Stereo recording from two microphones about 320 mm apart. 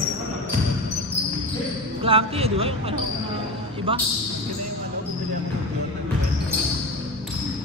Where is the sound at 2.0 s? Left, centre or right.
Centre.